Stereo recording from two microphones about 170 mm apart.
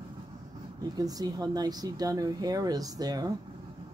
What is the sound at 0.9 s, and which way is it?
Speech, 20° right (ahead or behind).